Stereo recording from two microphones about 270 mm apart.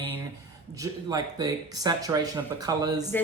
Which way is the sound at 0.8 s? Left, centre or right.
Centre.